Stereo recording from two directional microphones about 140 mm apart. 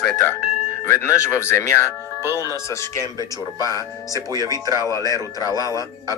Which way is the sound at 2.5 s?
20° left (ahead or behind).